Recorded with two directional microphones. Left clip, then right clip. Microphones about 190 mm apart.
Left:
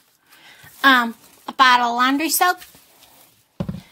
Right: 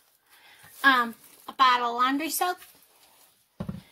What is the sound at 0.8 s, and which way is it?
Speech, 45° left (ahead or behind).